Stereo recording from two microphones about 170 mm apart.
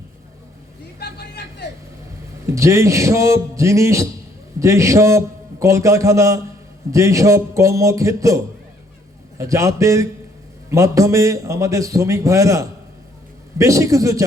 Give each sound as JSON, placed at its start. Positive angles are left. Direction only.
{"t": 2.5, "sound": "a man's voice", "side_deg": -15}
{"t": 9.4, "sound": "a man's voice", "side_deg": -20}